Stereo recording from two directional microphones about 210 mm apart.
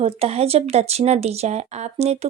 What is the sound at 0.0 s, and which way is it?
Speech, 30° right (ahead or behind).